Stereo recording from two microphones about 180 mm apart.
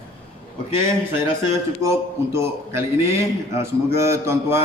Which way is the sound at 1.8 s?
15° right (ahead or behind).